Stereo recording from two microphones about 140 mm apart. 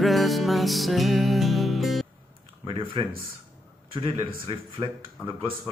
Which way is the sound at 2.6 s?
35° right (ahead or behind).